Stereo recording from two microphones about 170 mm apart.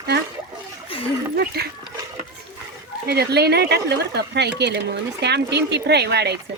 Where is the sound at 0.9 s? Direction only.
30° left (ahead or behind).